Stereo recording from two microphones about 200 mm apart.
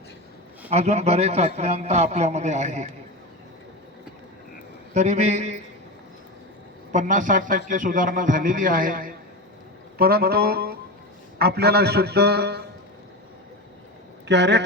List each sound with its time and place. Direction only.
0.7 s a man's voice: 30° right (ahead or behind)
4.9 s a man's voice: 35° right (ahead or behind)
6.9 s a man's voice: 40° right (ahead or behind)
14.3 s a man's voice: 60° right (ahead or behind)